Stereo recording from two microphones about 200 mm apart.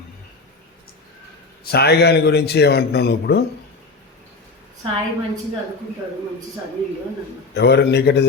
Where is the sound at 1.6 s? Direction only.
50° left (ahead or behind).